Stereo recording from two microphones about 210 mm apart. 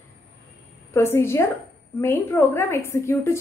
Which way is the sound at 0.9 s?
10° left (ahead or behind).